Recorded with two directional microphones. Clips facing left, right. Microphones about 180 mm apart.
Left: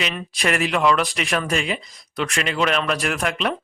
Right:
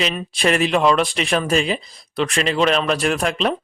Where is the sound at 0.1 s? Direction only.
25° right (ahead or behind).